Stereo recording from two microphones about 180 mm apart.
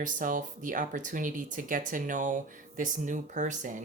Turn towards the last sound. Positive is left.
turn(degrees=-45)  # may be behind; listen again after turning